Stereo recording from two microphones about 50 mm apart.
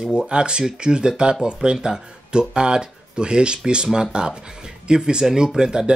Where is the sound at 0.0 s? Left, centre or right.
Centre.